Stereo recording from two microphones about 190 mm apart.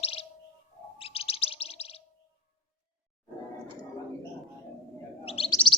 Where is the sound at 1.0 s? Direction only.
30° left (ahead or behind).